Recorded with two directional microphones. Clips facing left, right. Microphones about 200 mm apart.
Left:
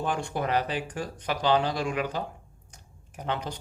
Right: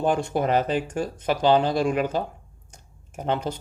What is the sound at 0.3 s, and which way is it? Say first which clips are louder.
Speech: right 6 dB; 45° right (ahead or behind).